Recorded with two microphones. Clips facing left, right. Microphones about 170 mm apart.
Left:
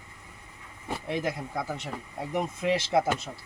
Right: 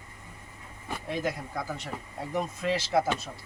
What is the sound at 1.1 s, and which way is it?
Speech, 20° left (ahead or behind).